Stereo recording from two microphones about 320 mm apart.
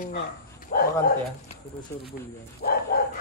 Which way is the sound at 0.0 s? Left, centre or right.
Left.